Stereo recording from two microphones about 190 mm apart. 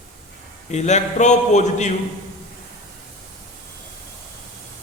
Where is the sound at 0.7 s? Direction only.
35° left (ahead or behind).